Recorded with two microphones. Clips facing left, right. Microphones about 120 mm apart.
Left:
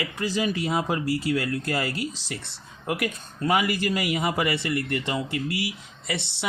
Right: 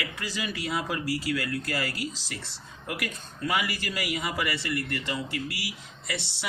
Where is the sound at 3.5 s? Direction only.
50° left (ahead or behind).